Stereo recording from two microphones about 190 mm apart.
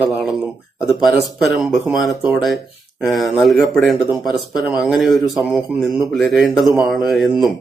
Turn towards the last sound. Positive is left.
turn(degrees=0)  # may be behind; listen again after turning